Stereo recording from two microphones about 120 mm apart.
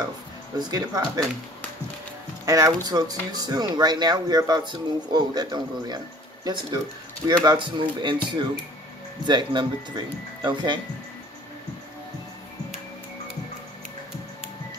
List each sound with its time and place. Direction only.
0.6 s speech: 35° right (ahead or behind)
2.4 s speech: 30° right (ahead or behind)